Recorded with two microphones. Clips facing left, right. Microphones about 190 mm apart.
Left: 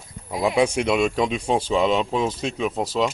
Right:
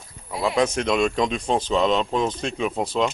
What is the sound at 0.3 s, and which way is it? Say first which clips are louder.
Speech: left 2 dB; 15° left (ahead or behind).